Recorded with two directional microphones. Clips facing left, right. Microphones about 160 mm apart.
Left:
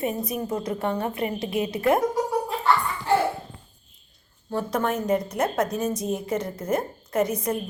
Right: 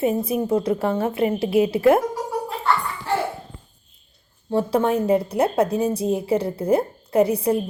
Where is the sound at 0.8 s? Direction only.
5° right (ahead or behind).